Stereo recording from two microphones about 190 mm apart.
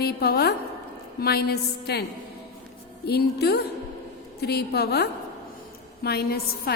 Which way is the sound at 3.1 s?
55° left (ahead or behind).